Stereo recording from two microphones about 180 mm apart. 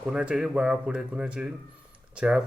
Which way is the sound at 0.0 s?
5° right (ahead or behind).